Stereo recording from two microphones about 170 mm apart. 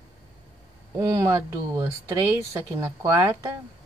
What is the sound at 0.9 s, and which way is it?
A woman's voice, 20° right (ahead or behind).